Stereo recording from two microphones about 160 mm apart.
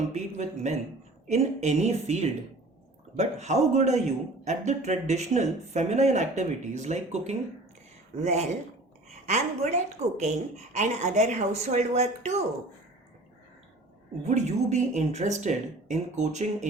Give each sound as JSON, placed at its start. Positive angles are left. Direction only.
{"t": 0.1, "sound": "a man's voice", "side_deg": -45}
{"t": 14.3, "sound": "a man's voice", "side_deg": -45}